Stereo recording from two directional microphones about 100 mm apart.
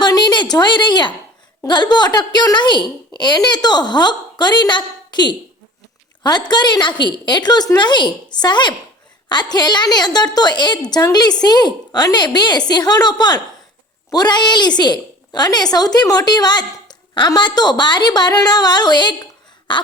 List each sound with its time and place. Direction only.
0.0 s a woman's voice: 45° left (ahead or behind)